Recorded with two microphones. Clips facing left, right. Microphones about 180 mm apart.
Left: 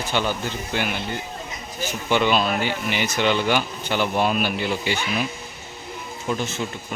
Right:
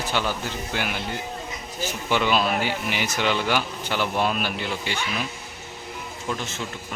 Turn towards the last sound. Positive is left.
turn(degrees=5)  # may be behind; listen again after turning